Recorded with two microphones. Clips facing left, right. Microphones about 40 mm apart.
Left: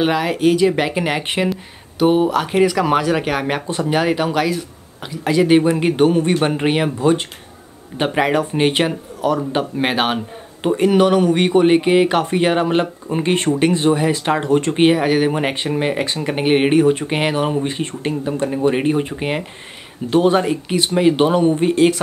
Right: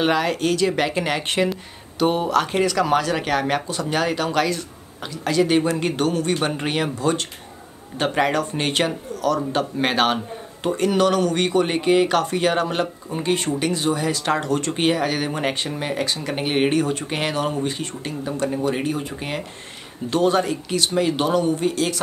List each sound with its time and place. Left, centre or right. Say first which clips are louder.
0.0 s speech: left 4 dB; centre
3.6 s speech: left 5 dB; left
3.9 s speech: left 3 dB; centre